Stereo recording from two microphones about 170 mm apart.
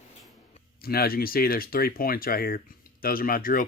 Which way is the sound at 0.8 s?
65° left (ahead or behind).